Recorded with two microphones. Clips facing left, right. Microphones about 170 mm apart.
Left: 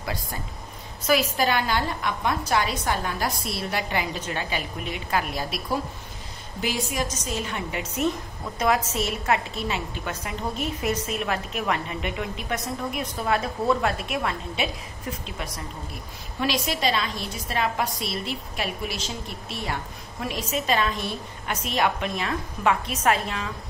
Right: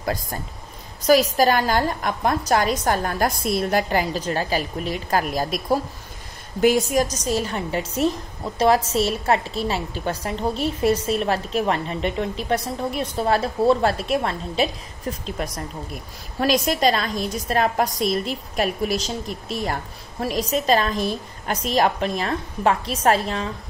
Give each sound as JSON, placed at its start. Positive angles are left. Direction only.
{"t": 0.0, "sound": "a woman's voice", "side_deg": -45}
{"t": 6.6, "sound": "a woman's voice", "side_deg": -45}